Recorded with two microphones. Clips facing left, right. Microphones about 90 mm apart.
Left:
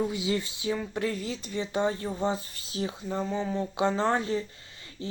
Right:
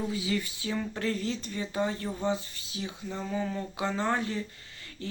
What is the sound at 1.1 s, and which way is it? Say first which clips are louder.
Speech: right 1 dB; 10° left (ahead or behind).